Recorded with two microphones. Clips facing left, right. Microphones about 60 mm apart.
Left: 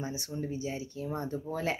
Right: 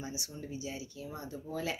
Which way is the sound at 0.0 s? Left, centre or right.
Left.